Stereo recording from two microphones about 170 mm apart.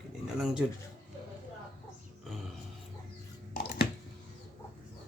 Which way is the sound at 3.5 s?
65° left (ahead or behind).